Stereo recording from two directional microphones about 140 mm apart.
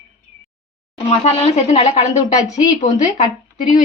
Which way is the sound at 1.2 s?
50° left (ahead or behind).